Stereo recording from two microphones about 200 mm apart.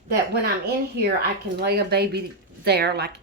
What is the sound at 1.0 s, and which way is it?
A woman's voice, 50° right (ahead or behind).